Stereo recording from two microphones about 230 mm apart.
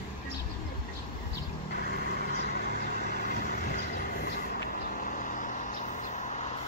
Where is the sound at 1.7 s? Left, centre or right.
Left.